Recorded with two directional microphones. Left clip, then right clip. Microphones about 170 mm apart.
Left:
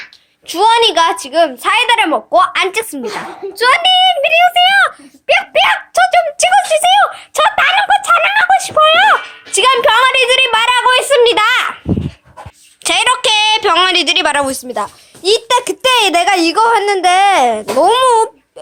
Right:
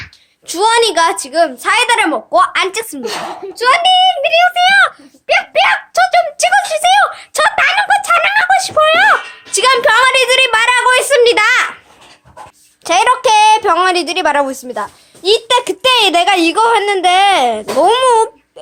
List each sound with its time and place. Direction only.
0.4 s a woman's voice: 10° right (ahead or behind)
2.9 s a woman's voice: 5° left (ahead or behind)
3.6 s a child's voice: 25° left (ahead or behind)
7.0 s a woman's voice: 5° left (ahead or behind)
12.8 s a woman's voice: centre (ahead or behind)
14.7 s a woman's voice: 15° left (ahead or behind)